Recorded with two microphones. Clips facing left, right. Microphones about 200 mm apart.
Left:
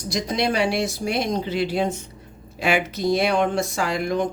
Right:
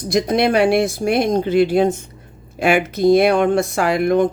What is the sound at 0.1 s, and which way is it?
Speech, 60° right (ahead or behind).